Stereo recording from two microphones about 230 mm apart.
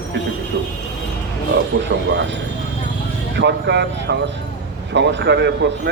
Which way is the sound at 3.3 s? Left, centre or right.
Right.